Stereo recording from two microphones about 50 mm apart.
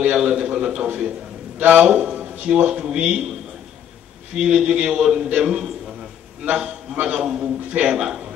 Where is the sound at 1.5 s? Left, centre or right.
Right.